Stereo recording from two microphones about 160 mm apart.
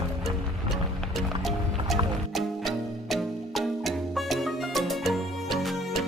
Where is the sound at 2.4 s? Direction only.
Centre (ahead or behind).